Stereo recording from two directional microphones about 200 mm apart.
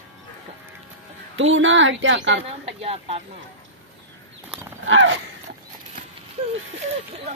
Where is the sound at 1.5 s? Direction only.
70° right (ahead or behind).